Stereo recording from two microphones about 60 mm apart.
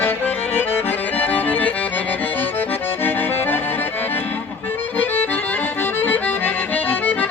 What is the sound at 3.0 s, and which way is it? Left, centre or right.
Accordion, left.